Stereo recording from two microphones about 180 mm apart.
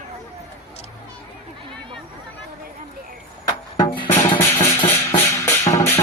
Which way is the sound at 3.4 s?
20° left (ahead or behind).